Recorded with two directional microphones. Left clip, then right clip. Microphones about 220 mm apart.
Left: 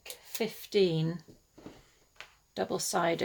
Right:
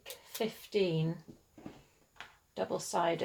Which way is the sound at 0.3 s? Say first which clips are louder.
Left 4 dB; 40° left (ahead or behind).